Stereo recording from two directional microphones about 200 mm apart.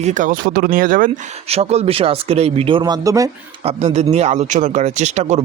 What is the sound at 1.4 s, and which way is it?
Speech, 30° right (ahead or behind).